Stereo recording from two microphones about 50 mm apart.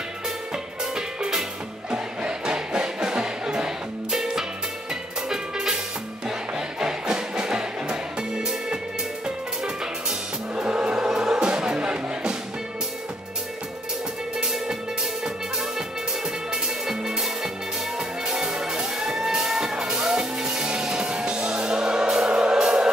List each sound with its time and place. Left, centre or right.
0.9 s music: centre
6.8 s music: centre
10.5 s music: right
14.4 s music: centre
16.8 s music: centre